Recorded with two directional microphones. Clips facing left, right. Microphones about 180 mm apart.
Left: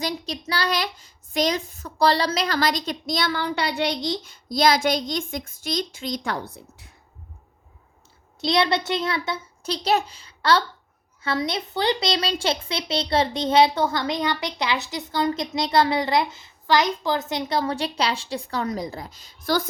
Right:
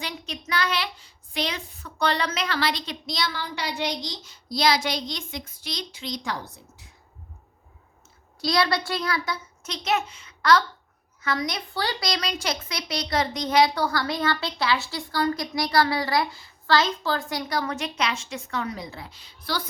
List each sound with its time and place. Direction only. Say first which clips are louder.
0.0 s a child's voice: left 6 dB; 35° left (ahead or behind); by 6.8 s 60° left (ahead or behind)
8.4 s speech: left 2 dB; 25° left (ahead or behind); by 19.6 s 45° left (ahead or behind)